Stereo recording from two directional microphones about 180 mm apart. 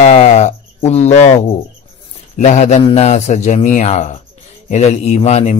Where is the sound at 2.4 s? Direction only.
40° left (ahead or behind).